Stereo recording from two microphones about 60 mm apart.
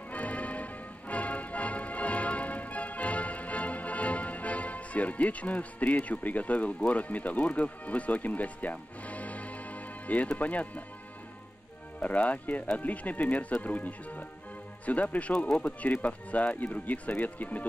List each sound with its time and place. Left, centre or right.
0.1 s music: left
6.0 s speech: left
12.0 s speech: left